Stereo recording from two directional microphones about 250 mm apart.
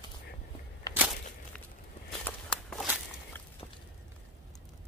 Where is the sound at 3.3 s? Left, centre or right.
Centre.